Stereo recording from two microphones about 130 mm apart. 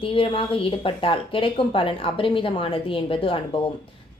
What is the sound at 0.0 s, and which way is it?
A woman's voice, 40° left (ahead or behind).